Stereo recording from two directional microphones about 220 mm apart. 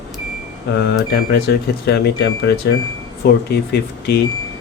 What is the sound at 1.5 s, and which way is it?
Speech, 50° left (ahead or behind).